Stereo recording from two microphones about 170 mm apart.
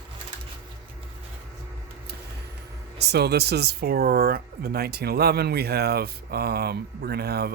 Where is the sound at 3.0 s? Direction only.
70° right (ahead or behind).